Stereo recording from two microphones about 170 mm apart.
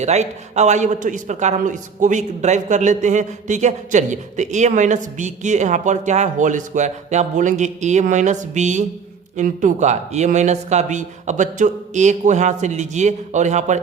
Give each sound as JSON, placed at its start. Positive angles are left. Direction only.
{"t": 0.0, "sound": "a man's voice", "side_deg": -40}